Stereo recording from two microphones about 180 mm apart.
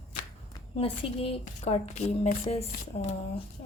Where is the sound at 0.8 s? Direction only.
30° left (ahead or behind).